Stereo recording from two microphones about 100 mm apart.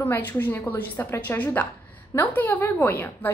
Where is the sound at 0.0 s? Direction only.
20° left (ahead or behind).